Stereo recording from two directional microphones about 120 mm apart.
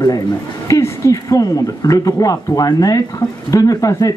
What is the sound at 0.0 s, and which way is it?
A man's voice, 25° left (ahead or behind).